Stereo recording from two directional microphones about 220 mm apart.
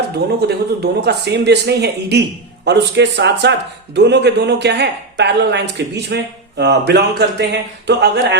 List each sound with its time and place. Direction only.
0.3 s speech: 50° right (ahead or behind)